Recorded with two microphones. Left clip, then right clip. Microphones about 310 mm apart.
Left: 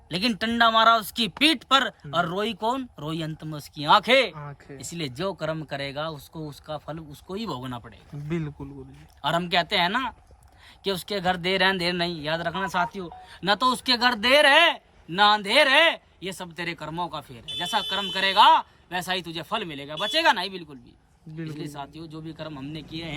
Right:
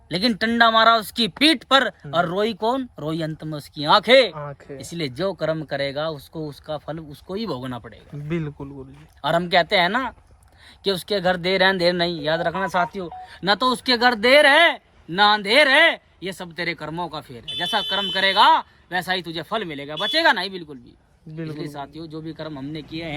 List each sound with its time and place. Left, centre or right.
0.1 s speech: centre
6.1 s speech: centre
6.7 s speech: centre